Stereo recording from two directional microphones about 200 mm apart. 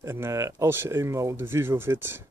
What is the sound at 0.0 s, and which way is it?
Speech, 15° right (ahead or behind).